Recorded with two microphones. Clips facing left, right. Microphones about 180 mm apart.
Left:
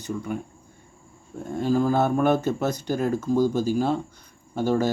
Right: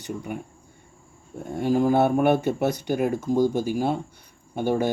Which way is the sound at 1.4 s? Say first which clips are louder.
Right 1 dB; 15° right (ahead or behind).